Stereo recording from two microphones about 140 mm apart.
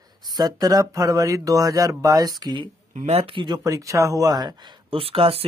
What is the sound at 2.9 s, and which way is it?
Speech, 50° right (ahead or behind).